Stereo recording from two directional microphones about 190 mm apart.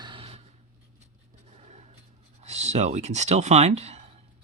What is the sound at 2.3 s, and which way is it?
Speech, 35° right (ahead or behind).